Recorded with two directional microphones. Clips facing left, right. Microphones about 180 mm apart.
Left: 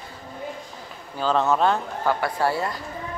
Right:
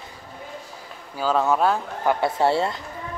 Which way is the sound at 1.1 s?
5° right (ahead or behind).